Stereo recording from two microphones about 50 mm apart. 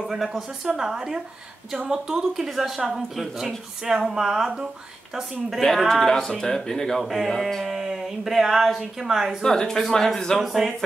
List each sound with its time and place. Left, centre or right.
0.0 s speech: centre
5.6 s speech: centre
7.0 s speech: centre
9.4 s speech: centre
10.4 s speech: centre